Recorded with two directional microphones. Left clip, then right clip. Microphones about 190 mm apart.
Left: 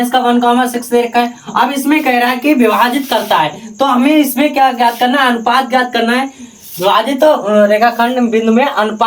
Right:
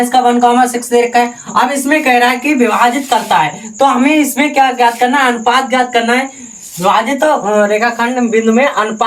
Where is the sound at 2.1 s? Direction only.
10° left (ahead or behind).